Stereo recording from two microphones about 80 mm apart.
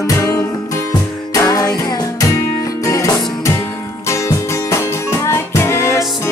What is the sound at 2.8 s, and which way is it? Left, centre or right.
Music, left.